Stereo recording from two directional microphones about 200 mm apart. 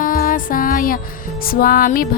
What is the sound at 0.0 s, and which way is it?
Music, 45° left (ahead or behind).